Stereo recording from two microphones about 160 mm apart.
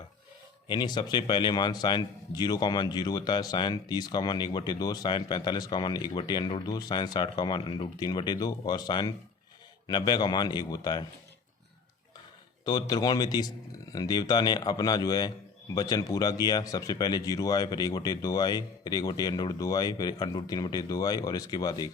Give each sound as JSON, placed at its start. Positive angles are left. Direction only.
{"t": 0.7, "sound": "a man's voice", "side_deg": 25}
{"t": 12.6, "sound": "a man's voice", "side_deg": 25}